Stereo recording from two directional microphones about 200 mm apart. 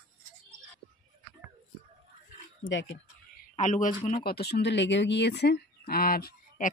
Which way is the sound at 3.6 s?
40° left (ahead or behind).